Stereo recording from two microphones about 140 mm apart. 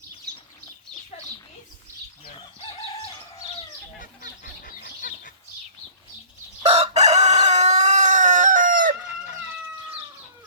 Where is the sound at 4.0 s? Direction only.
80° left.